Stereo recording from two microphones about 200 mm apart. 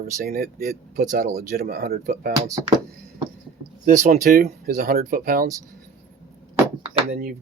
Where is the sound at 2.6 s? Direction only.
20° right (ahead or behind).